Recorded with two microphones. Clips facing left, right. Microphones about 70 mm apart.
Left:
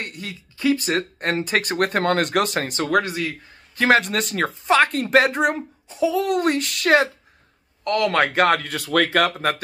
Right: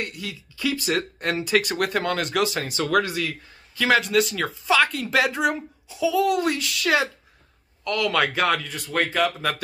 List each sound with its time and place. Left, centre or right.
0.0 s speech: left
8.6 s speech: left